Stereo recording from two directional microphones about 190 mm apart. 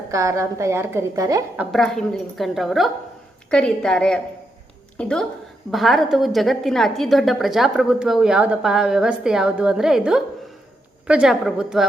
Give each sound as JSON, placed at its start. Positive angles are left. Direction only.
{"t": 0.1, "sound": "a woman's voice", "side_deg": -15}
{"t": 1.7, "sound": "a woman's voice", "side_deg": 0}